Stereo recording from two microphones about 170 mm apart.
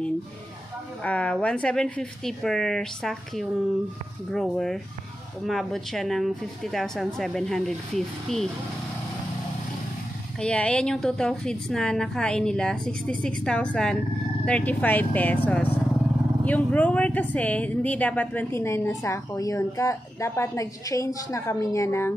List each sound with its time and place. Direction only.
1.0 s a woman's voice: 5° left (ahead or behind)
10.4 s a woman's voice: 5° left (ahead or behind)